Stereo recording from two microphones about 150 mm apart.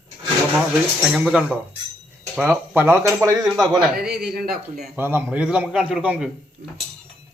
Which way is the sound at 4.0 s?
90° right.